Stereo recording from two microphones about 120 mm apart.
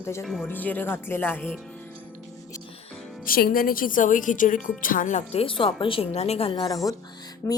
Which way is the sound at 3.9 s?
90° left.